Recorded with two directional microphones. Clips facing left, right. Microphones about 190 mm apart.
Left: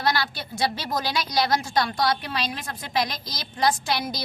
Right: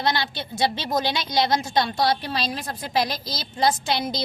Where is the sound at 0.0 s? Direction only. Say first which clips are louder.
Right 1 dB; 20° right (ahead or behind).